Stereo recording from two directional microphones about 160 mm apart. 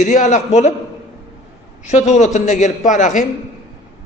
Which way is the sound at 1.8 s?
45° left (ahead or behind).